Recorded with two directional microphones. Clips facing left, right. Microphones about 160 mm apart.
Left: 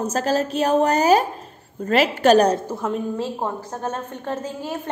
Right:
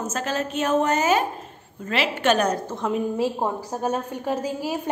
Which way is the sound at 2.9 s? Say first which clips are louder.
Right 3 dB; 10° right (ahead or behind).